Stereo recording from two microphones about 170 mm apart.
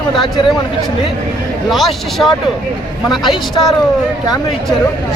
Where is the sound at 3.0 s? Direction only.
25° left (ahead or behind).